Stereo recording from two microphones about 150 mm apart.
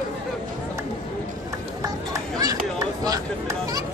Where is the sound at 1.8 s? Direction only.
25° right (ahead or behind).